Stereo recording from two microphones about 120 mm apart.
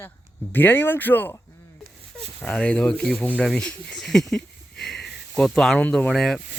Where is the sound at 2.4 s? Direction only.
10° left (ahead or behind).